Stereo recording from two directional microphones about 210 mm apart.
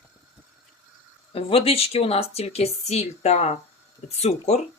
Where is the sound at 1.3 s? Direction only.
25° left (ahead or behind).